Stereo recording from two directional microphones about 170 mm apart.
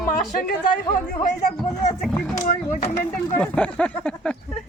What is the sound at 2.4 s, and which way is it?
Speech, 50° left (ahead or behind).